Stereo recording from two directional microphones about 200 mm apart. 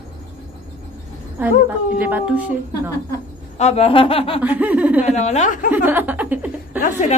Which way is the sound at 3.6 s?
30° left (ahead or behind).